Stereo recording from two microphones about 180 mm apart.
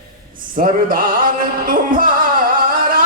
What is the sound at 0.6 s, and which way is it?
Music, 50° right (ahead or behind).